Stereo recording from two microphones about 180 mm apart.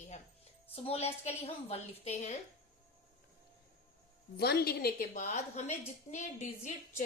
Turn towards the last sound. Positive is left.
turn(degrees=45)  # may be behind; listen again after turning